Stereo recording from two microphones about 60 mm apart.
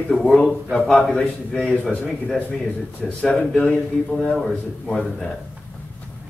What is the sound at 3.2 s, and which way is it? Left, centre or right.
A man's voice, centre.